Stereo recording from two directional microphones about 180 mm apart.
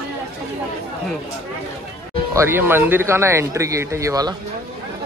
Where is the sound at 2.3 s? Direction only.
15° right (ahead or behind).